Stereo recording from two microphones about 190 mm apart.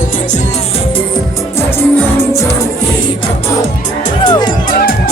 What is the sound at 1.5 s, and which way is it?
Music, 15° left (ahead or behind).